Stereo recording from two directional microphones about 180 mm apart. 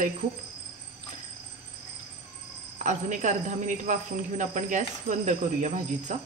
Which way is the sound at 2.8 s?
45° right (ahead or behind).